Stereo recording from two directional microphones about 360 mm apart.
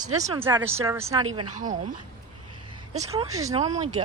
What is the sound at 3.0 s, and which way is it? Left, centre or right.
Speech, centre.